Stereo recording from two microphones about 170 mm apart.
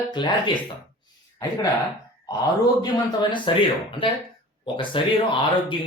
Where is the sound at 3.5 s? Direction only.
30° left (ahead or behind).